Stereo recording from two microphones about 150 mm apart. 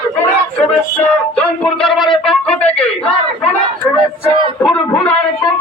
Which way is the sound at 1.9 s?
30° left (ahead or behind).